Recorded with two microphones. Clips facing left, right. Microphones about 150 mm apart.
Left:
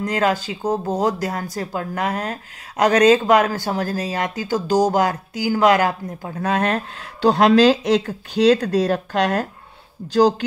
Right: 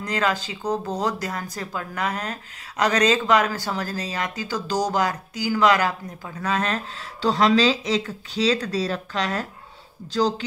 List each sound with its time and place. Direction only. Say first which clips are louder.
0.0 s speech: left 5 dB; 50° left (ahead or behind)